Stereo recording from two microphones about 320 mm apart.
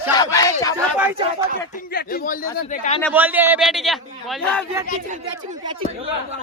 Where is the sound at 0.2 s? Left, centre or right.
Centre.